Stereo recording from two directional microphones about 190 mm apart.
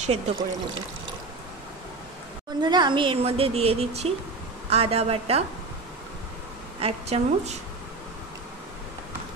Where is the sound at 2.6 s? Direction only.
25° right (ahead or behind).